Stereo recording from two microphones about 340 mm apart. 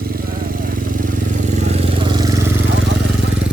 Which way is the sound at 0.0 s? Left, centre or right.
Right.